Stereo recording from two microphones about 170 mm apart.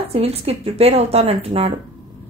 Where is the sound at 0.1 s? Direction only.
35° right (ahead or behind).